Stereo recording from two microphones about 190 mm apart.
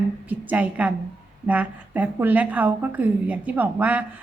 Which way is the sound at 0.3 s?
5° right (ahead or behind).